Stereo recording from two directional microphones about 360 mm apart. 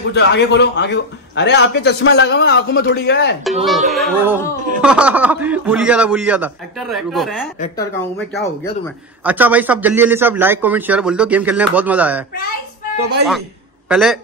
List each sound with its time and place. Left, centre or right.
0.1 s a man's voice: left
3.6 s speech: centre
9.2 s speech: centre
13.8 s a man's voice: centre